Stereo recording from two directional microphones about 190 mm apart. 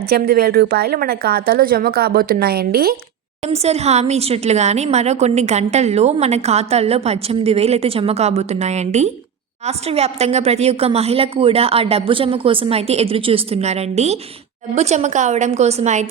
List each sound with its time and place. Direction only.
0.1 s a woman's voice: 55° right (ahead or behind)
3.4 s speech: 35° right (ahead or behind)